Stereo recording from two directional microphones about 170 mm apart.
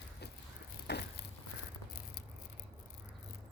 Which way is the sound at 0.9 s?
75° left (ahead or behind).